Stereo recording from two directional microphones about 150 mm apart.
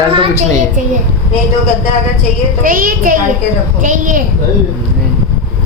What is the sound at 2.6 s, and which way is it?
A child's voice, 70° right (ahead or behind).